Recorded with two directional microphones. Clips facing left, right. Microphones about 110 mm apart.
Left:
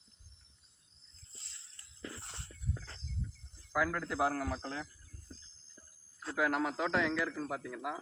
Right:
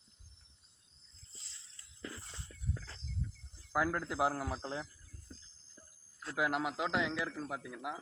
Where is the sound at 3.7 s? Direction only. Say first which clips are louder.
Even; 20° right (ahead or behind).